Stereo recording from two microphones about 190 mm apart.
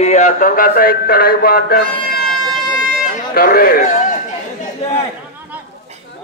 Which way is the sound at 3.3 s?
50° left (ahead or behind).